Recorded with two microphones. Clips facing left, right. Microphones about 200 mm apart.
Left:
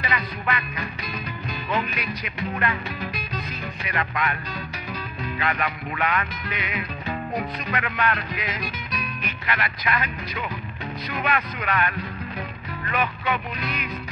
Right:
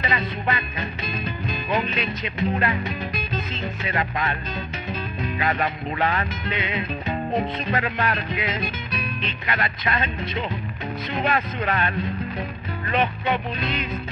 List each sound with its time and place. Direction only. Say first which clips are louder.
0.0 s music: right 3 dB; 25° right (ahead or behind)
5.4 s music: right 2 dB; 30° right (ahead or behind)
12.9 s music: right 3 dB; 30° right (ahead or behind)